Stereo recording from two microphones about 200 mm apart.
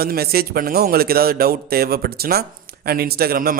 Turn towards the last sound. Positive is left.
turn(degrees=-45)  # may be behind; listen again after turning